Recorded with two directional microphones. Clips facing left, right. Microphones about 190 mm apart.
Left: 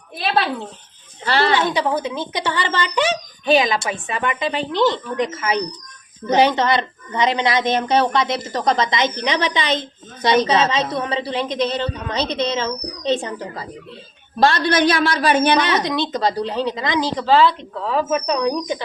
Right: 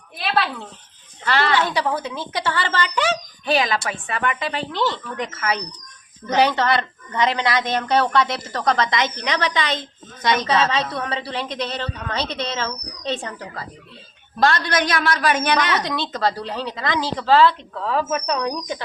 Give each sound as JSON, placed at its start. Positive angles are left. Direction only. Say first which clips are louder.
{"t": 0.3, "sound": "a woman's voice", "louder": "left 2 dB", "side_deg": 35}